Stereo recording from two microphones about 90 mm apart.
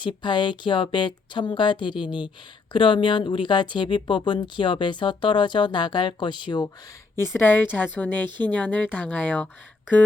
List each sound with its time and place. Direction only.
0.0 s speech: 65° left (ahead or behind)
7.2 s a woman's voice: 25° left (ahead or behind)